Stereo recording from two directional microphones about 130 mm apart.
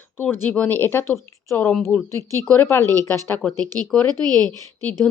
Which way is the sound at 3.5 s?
30° right (ahead or behind).